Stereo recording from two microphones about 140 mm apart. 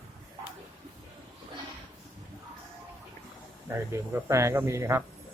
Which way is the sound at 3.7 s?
20° right (ahead or behind).